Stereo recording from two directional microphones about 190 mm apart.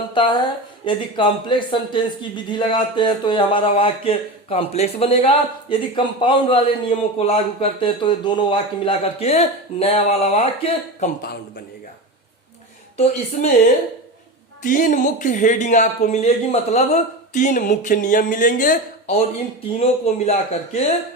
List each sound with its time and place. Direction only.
0.1 s a sound: 25° left (ahead or behind)
0.9 s speech: 25° left (ahead or behind)
11.2 s a man's voice: 50° left (ahead or behind)
13.4 s speech: 40° left (ahead or behind)
14.6 s speech: 45° left (ahead or behind)